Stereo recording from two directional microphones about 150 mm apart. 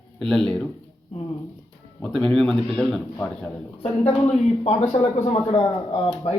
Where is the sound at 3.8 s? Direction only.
45° left (ahead or behind).